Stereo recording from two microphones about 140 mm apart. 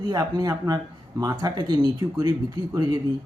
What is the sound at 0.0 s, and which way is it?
Speech, 30° right (ahead or behind).